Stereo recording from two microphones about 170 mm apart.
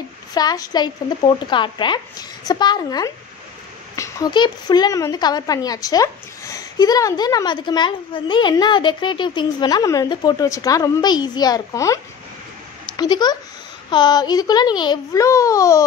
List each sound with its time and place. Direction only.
0.3 s a woman's voice: 25° left (ahead or behind)